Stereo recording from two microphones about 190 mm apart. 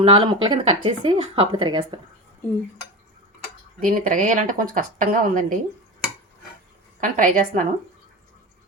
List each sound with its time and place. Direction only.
0.0 s speech: 25° right (ahead or behind)
3.8 s speech: 45° right (ahead or behind)
7.0 s speech: 45° right (ahead or behind)